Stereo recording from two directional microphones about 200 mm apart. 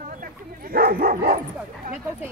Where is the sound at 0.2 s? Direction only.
45° right (ahead or behind).